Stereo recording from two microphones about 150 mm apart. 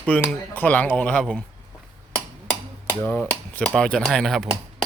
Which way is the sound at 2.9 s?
10° left (ahead or behind).